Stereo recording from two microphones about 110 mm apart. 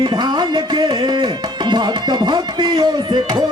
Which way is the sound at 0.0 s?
40° right (ahead or behind).